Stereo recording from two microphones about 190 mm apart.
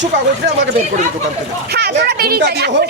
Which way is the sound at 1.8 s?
60° right (ahead or behind).